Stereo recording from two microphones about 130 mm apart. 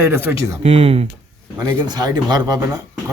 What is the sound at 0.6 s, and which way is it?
Speech, 55° right (ahead or behind).